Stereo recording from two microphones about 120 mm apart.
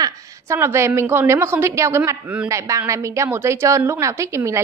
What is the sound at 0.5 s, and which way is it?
A woman's voice, 20° right (ahead or behind).